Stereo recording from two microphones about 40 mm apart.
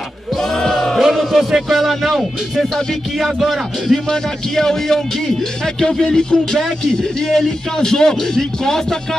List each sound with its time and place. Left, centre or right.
0.4 s music: centre
1.0 s a man's voice: centre
4.1 s speech: centre